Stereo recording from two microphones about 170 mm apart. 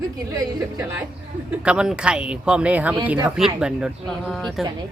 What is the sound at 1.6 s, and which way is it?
Speech, 5° right (ahead or behind).